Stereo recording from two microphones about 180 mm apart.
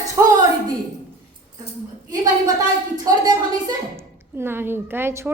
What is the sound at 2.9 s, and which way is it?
A woman's voice, 20° right (ahead or behind).